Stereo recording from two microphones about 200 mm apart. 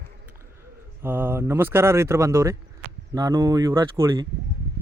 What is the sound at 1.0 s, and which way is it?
Speech, 10° right (ahead or behind).